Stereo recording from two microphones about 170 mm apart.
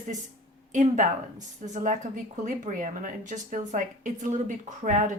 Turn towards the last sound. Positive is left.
turn(degrees=-45)  # may be behind; listen again after turning